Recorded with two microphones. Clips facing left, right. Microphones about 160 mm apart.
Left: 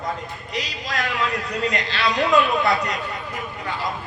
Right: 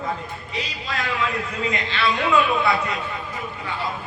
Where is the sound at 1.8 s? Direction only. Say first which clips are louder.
Even; 40° left (ahead or behind).